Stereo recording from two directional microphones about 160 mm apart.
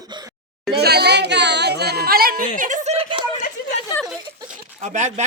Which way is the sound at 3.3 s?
50° left (ahead or behind).